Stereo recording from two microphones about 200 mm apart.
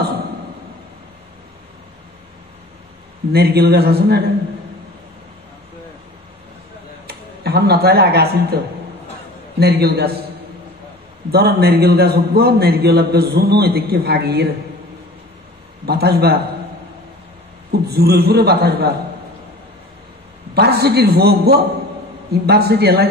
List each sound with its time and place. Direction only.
3.3 s a man's voice: 50° right (ahead or behind)
7.1 s speech: 55° right (ahead or behind)
9.6 s a man's voice: 55° right (ahead or behind)
11.3 s a man's voice: 55° right (ahead or behind)
15.8 s a man's voice: 50° right (ahead or behind)
17.8 s a man's voice: 55° right (ahead or behind)
20.5 s a man's voice: 55° right (ahead or behind)